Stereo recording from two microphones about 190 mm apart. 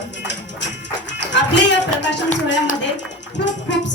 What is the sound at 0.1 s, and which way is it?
Music, 65° left (ahead or behind).